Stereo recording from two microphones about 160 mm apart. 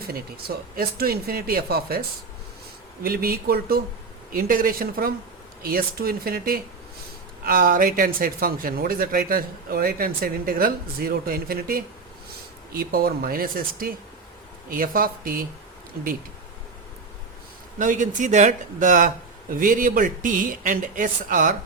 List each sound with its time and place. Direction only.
0.1 s speech: 70° right (ahead or behind)
17.7 s speech: 55° right (ahead or behind)